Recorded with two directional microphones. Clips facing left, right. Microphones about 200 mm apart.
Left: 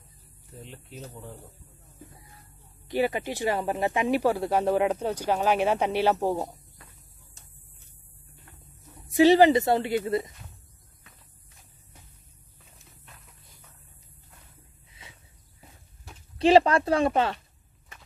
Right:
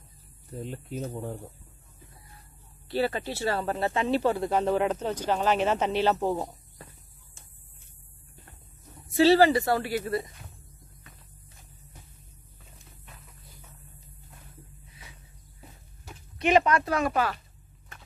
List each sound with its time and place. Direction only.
0.7 s speech: 45° right (ahead or behind)
2.9 s speech: 15° left (ahead or behind)
9.1 s speech: 15° left (ahead or behind)
16.3 s speech: 30° left (ahead or behind)